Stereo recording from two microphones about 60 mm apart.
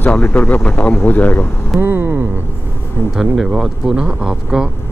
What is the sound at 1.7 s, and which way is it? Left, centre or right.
Speech, right.